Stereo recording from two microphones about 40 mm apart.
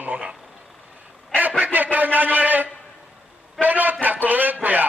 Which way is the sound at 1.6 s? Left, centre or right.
Right.